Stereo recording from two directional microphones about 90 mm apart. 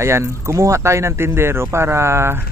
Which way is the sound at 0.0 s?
30° right (ahead or behind).